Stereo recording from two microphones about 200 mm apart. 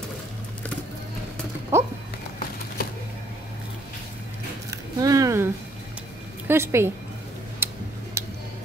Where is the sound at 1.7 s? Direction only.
15° right (ahead or behind).